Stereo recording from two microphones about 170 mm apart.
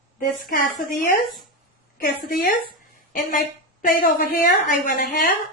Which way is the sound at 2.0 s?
55° left (ahead or behind).